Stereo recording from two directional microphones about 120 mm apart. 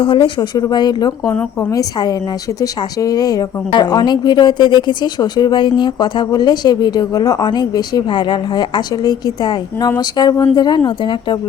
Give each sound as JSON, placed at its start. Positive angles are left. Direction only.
{"t": 0.0, "sound": "a woman's voice", "side_deg": 45}